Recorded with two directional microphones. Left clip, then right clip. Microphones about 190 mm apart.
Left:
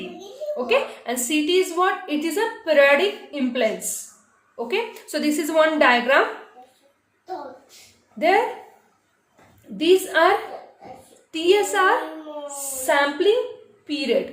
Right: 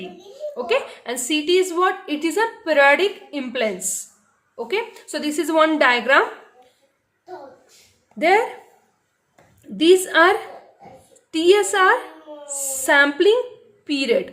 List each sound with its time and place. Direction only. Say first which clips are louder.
0.5 s a woman's voice: left 1 dB; 25° right (ahead or behind)
4.5 s a woman's voice: even; 20° right (ahead or behind)
9.7 s a woman's voice: right 3 dB; 30° right (ahead or behind)